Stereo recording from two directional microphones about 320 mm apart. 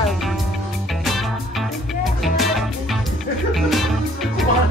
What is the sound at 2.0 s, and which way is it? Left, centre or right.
Music, centre.